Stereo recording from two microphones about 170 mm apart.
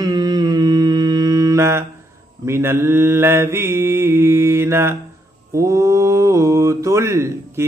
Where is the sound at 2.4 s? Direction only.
15° right (ahead or behind).